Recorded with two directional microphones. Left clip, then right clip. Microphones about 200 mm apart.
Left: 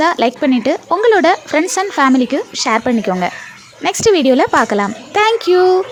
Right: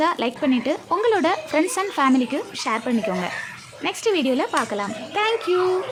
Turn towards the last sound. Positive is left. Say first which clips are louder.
# left 9 dB
turn(degrees=35)  # may be behind; listen again after turning